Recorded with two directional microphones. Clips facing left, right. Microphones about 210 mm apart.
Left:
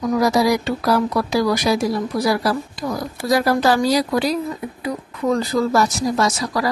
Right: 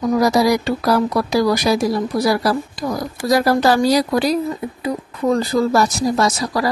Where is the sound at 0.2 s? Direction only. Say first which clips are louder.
Right 1 dB; 40° right (ahead or behind).